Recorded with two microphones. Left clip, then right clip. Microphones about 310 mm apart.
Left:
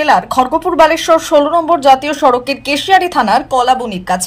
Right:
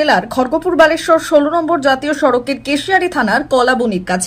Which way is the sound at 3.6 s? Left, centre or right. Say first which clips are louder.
Left 1 dB; left.